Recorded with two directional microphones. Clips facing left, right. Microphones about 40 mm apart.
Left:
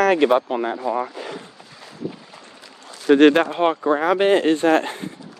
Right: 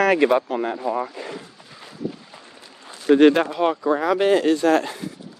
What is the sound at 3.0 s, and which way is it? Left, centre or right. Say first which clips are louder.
Speech: left 1 dB; left.